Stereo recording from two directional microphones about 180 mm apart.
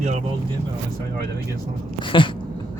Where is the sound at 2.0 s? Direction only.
30° left (ahead or behind).